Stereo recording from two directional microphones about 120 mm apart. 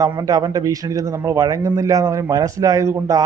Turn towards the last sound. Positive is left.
turn(degrees=-25)  # may be behind; listen again after turning